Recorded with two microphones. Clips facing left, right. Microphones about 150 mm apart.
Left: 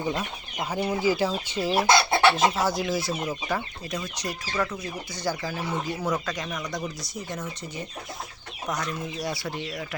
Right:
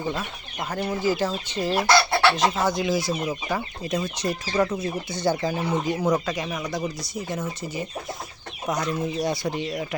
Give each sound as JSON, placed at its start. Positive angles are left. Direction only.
{"t": 0.7, "sound": "speech", "side_deg": 10}
{"t": 1.9, "sound": "chicken", "side_deg": 20}
{"t": 2.3, "sound": "speech", "side_deg": 5}
{"t": 3.9, "sound": "speech", "side_deg": -25}